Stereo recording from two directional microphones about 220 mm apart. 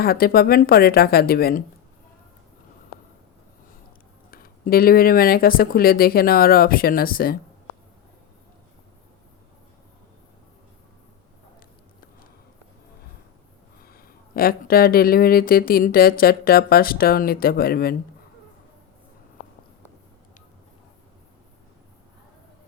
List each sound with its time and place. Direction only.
0.0 s speech: 45° left (ahead or behind)
4.3 s speech: 40° left (ahead or behind)
13.8 s speech: 40° left (ahead or behind)